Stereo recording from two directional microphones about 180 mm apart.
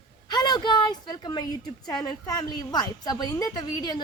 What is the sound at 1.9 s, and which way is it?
A woman's voice, 20° left (ahead or behind).